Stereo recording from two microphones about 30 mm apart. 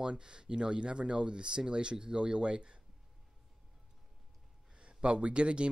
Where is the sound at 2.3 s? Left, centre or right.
Right.